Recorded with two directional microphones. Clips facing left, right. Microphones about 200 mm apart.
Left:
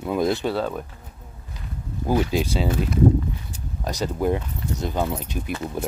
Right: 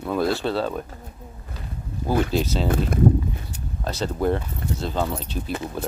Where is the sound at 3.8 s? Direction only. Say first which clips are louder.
Even; 15° left (ahead or behind).